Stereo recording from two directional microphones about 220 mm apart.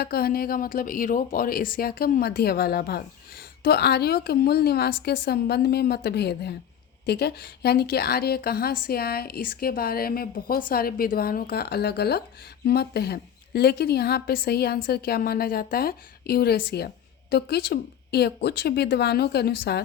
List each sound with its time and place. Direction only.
0.0 s a woman's voice: 45° left (ahead or behind)